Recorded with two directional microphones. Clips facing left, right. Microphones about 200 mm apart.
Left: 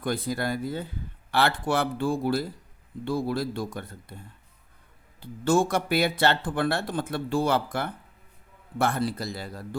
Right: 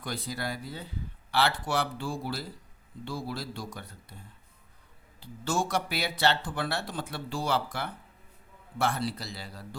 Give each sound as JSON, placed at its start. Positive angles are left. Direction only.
{"t": 0.0, "sound": "speech", "side_deg": 55}
{"t": 5.2, "sound": "speech", "side_deg": 55}